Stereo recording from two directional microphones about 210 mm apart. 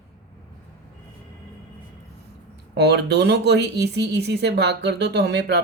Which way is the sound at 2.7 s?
50° right (ahead or behind).